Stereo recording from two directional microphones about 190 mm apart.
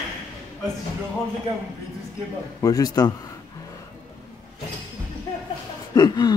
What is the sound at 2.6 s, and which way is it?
Speech, 20° left (ahead or behind).